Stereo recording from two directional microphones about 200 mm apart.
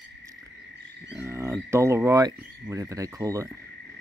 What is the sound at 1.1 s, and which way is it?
Speech, 10° right (ahead or behind).